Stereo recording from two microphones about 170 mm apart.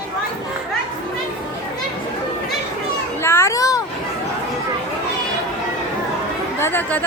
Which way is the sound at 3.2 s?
15° left (ahead or behind).